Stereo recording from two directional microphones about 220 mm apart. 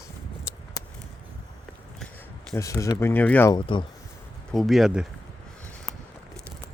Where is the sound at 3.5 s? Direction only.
20° left (ahead or behind).